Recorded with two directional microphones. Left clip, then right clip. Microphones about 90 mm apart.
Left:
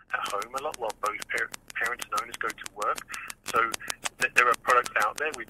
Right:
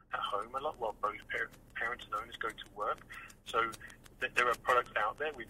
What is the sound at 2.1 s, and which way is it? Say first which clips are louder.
Speech: left 8 dB; 40° left (ahead or behind).